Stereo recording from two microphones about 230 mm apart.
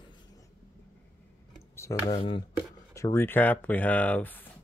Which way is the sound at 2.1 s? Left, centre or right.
Left.